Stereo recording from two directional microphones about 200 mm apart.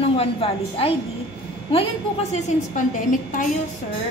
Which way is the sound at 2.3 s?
40° left (ahead or behind).